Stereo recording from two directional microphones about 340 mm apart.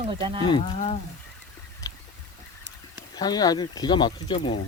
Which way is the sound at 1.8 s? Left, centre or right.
Centre.